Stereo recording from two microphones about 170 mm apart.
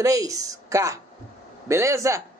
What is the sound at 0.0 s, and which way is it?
A man's voice, 20° right (ahead or behind).